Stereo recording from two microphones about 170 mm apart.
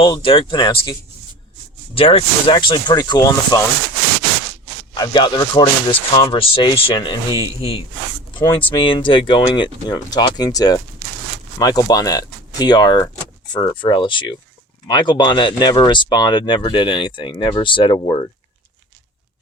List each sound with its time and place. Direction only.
0.0 s speech: 30° left (ahead or behind)
2.0 s speech: 35° left (ahead or behind)
4.9 s speech: 25° left (ahead or behind)